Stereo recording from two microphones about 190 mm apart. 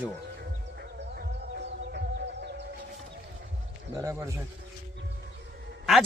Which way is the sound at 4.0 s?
15° right (ahead or behind).